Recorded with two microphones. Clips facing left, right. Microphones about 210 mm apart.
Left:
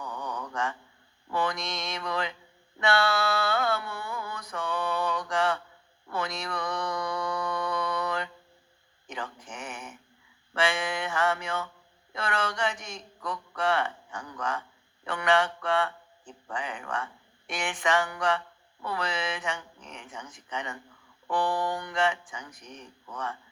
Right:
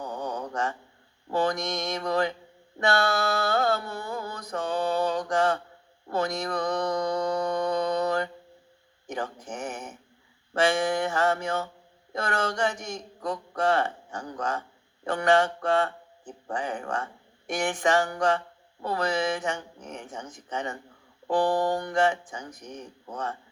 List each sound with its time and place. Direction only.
0.0 s mantra: 40° right (ahead or behind)
1.3 s speech: 45° right (ahead or behind)
2.7 s mantra: 40° right (ahead or behind)
6.1 s a sound: 40° right (ahead or behind)
6.4 s mantra: 45° right (ahead or behind)
9.0 s a sound: 45° right (ahead or behind)
10.5 s speech: 45° right (ahead or behind)
13.1 s a sound: 45° right (ahead or behind)
15.0 s speech: 45° right (ahead or behind)
22.5 s speech: 20° right (ahead or behind)
22.8 s speech: 40° right (ahead or behind)